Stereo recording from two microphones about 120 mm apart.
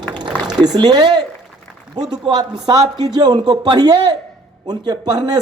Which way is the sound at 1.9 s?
35° right (ahead or behind).